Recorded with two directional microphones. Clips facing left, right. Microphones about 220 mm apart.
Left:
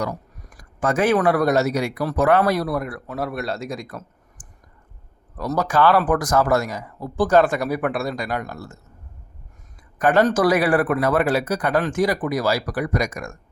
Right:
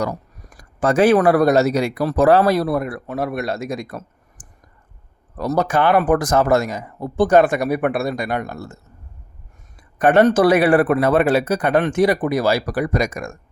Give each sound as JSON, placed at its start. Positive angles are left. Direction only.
{"t": 0.0, "sound": "speech", "side_deg": -35}
{"t": 5.4, "sound": "speech", "side_deg": -25}
{"t": 10.0, "sound": "speech", "side_deg": -25}